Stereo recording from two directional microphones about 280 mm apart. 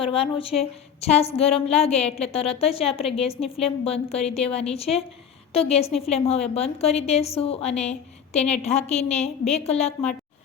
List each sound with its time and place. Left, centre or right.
0.0 s a woman's voice: centre